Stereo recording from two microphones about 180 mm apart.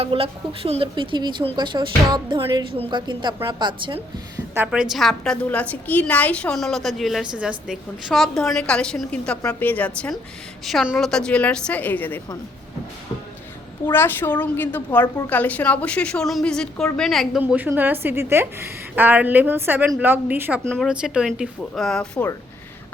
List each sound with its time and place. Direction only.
0.0 s speech: 30° right (ahead or behind)
4.5 s a woman's voice: 5° right (ahead or behind); by 12.2 s 10° left (ahead or behind)
13.8 s a woman's voice: 10° left (ahead or behind)
17.4 s a woman's voice: 10° right (ahead or behind)
20.7 s a woman's voice: 5° left (ahead or behind)